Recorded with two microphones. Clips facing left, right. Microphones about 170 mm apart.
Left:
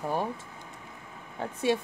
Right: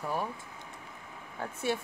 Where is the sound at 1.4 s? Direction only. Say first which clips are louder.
Left 5 dB; 20° left (ahead or behind).